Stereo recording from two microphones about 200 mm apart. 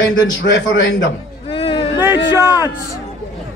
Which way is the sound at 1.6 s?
25° left (ahead or behind).